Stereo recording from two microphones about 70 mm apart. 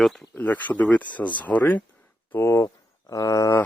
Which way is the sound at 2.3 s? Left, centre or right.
Left.